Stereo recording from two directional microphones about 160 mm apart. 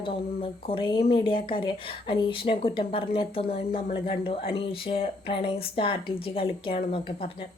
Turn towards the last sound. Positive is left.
turn(degrees=35)  # may be behind; listen again after turning